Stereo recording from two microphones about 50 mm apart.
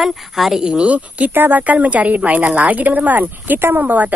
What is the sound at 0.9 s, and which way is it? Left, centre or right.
A woman's voice, right.